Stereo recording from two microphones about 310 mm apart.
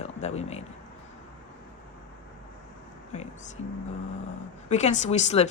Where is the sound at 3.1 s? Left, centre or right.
Left.